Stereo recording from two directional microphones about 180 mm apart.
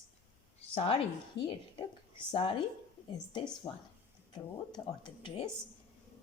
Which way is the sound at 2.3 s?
30° left (ahead or behind).